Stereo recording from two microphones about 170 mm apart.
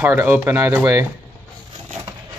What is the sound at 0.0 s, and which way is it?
Speech, 10° right (ahead or behind).